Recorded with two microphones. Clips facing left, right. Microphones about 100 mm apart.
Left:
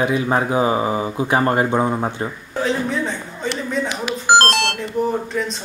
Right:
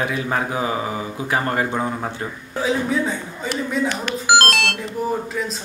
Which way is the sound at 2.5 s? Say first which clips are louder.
Right 1 dB; 5° right (ahead or behind).